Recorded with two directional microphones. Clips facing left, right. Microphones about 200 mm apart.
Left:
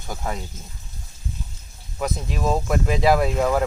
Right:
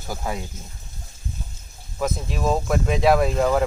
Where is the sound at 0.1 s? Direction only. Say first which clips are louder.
Right 1 dB; 5° right (ahead or behind).